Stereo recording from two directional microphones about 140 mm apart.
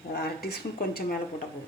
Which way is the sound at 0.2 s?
90° left.